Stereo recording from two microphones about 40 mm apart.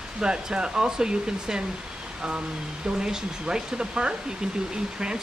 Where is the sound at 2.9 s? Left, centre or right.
Centre.